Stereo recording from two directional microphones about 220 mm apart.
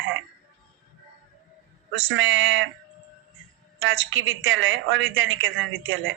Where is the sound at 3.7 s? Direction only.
65° right (ahead or behind).